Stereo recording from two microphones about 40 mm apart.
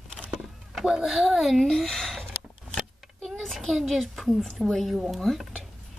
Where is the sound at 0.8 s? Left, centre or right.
Centre.